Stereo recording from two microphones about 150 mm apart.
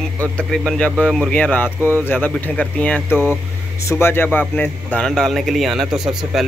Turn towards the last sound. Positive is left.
turn(degrees=0)  # may be behind; listen again after turning